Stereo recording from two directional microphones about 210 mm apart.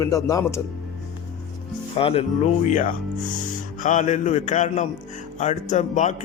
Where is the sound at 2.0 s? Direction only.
25° left (ahead or behind).